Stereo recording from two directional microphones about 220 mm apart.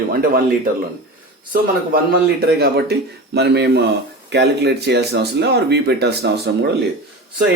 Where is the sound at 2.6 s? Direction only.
45° right (ahead or behind).